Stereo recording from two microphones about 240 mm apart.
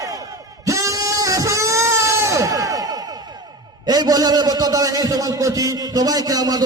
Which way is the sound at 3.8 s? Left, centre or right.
Centre.